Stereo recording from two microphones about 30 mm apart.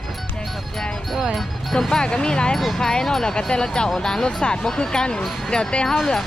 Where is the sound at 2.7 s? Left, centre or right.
Centre.